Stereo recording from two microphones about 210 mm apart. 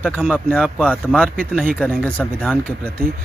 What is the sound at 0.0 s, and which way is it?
Speech, 5° left (ahead or behind).